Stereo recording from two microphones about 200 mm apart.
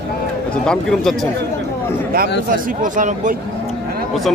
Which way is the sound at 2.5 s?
40° right (ahead or behind).